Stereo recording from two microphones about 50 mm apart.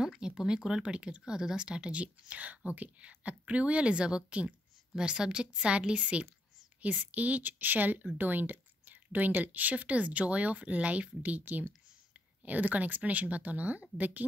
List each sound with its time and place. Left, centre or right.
0.2 s speech: centre; by 14.2 s right